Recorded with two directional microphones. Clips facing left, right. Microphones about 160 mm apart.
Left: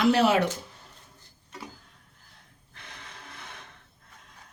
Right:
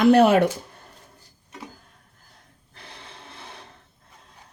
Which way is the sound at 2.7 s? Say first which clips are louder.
Right 3 dB; 35° right (ahead or behind).